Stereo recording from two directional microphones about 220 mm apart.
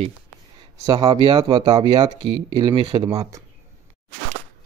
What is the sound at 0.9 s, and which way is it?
Speech, 20° right (ahead or behind).